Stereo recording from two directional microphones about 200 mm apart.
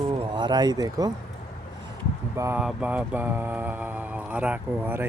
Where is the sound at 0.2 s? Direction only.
20° right (ahead or behind).